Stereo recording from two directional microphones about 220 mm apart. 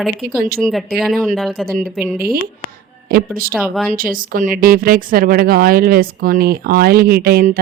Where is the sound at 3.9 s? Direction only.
40° right (ahead or behind).